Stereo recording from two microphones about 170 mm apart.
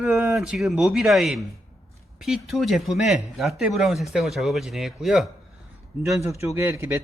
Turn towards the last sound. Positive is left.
turn(degrees=-15)  # may be behind; listen again after turning